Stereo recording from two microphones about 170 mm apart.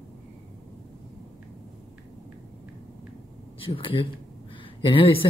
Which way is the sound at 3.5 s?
30° left (ahead or behind).